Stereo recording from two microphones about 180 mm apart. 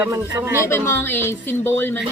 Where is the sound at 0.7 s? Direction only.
15° left (ahead or behind).